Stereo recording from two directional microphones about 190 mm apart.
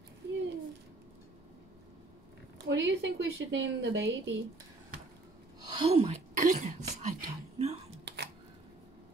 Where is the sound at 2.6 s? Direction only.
70° right (ahead or behind).